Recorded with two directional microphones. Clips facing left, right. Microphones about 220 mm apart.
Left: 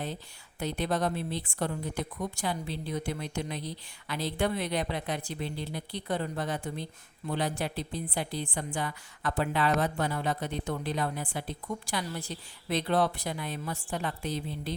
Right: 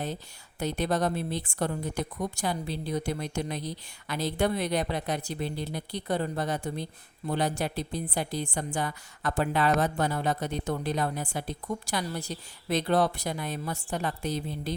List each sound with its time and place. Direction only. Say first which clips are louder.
0.6 s a woman's voice: right 2 dB; 40° right (ahead or behind)